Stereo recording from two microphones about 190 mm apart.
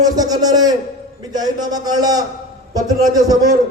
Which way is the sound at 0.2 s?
20° right (ahead or behind).